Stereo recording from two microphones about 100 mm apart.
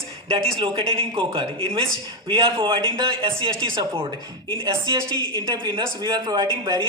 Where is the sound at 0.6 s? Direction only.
60° right (ahead or behind).